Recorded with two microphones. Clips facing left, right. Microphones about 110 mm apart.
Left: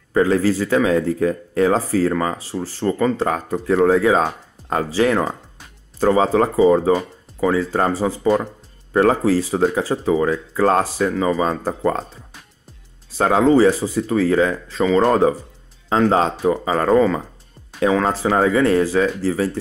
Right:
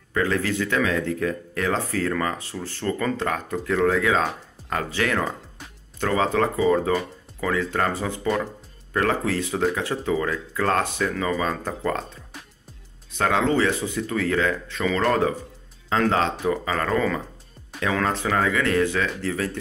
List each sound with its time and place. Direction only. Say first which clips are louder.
0.1 s speech: left 7 dB; 30° left (ahead or behind)